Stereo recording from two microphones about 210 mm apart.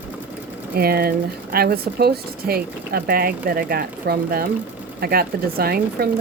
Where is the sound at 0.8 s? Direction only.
45° right (ahead or behind).